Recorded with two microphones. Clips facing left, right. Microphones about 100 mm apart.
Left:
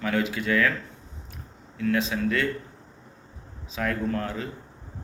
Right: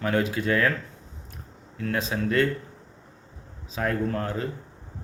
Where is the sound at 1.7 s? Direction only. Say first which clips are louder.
Left 2 dB; 35° right (ahead or behind).